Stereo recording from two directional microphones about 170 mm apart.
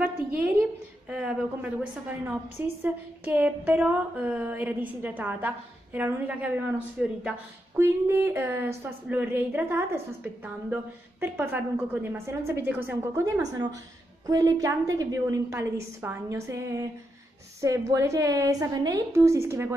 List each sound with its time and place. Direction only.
1.1 s a woman's voice: 5° right (ahead or behind)